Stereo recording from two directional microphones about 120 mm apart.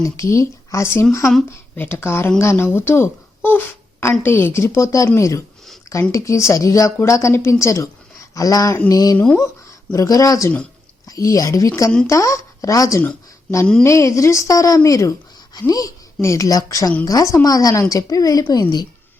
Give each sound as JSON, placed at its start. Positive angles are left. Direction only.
{"t": 0.0, "sound": "a woman's voice", "side_deg": 25}
{"t": 9.1, "sound": "speech", "side_deg": 10}
{"t": 9.9, "sound": "a woman's voice", "side_deg": 30}